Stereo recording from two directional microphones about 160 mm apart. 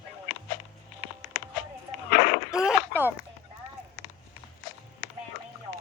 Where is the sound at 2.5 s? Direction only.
10° right (ahead or behind).